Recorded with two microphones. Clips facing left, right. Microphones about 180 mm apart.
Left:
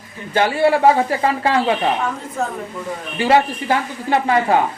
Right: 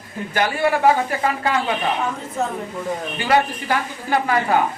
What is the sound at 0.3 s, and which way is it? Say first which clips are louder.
A man's voice: left 4 dB; 25° left (ahead or behind).